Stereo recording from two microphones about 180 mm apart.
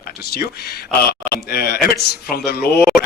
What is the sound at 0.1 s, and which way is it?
Speech, 60° left (ahead or behind).